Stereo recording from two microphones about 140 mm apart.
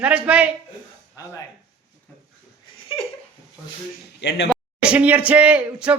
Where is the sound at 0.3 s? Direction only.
10° right (ahead or behind).